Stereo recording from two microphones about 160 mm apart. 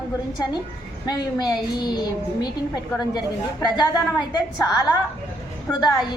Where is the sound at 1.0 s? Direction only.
25° left (ahead or behind).